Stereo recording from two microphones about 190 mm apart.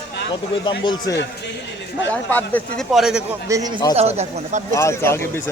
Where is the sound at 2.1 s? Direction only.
10° left (ahead or behind).